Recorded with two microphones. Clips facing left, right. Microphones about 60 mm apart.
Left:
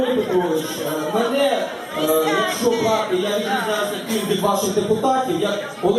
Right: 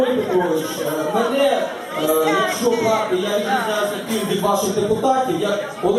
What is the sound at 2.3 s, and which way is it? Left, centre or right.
Music, right.